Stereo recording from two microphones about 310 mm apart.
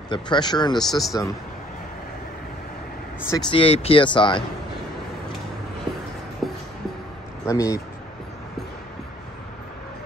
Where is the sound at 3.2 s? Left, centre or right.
Centre.